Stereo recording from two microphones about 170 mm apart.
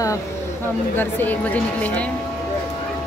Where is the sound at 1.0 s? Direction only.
10° left (ahead or behind).